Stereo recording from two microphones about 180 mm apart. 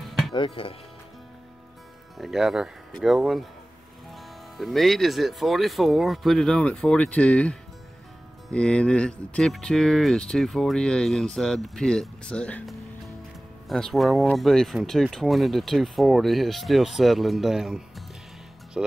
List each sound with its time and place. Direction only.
0.3 s speech: 30° left (ahead or behind)
2.1 s speech: centre (ahead or behind)